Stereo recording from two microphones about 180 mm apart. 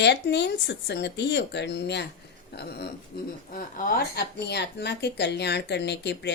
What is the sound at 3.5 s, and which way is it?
A woman's voice, 50° left (ahead or behind).